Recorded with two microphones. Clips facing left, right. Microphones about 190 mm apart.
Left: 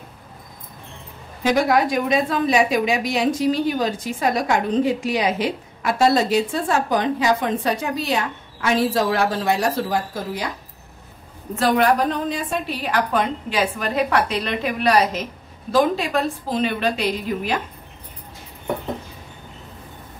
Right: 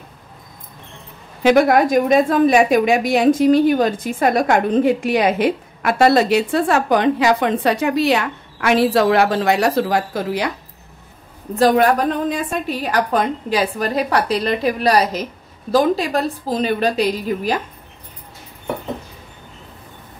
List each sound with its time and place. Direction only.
1.4 s a woman's voice: 60° right (ahead or behind)
11.5 s a woman's voice: 45° right (ahead or behind)